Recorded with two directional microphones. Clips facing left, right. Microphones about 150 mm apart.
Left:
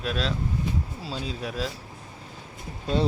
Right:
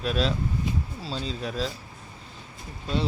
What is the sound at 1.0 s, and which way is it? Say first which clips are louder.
Speech: right 1 dB; 10° left (ahead or behind).